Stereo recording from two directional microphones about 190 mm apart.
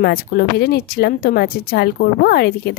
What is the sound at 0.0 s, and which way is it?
Speech, 55° left (ahead or behind).